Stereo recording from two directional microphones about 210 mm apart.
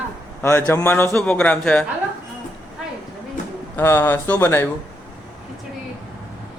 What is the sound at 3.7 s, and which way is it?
Speech, 10° left (ahead or behind).